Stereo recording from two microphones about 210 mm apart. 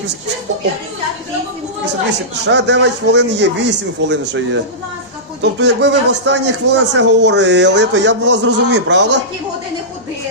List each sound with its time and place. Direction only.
1.8 s speech: 55° right (ahead or behind); by 8.4 s 75° right (ahead or behind)
8.4 s speech: 55° right (ahead or behind)